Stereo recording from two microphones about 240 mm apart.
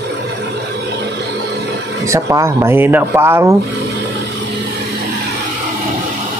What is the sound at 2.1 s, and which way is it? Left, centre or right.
Speech, centre.